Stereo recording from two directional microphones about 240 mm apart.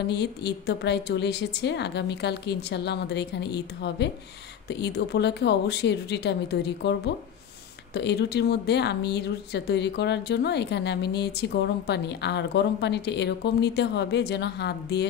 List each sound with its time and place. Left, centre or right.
0.0 s a woman's voice: left